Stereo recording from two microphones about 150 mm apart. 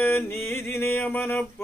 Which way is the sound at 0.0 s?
15° left (ahead or behind).